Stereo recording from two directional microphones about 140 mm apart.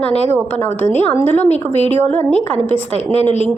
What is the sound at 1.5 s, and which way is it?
Speech, 50° left (ahead or behind).